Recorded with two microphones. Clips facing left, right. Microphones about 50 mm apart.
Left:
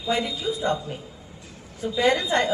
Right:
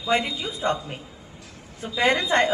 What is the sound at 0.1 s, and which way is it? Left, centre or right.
A woman's voice, right.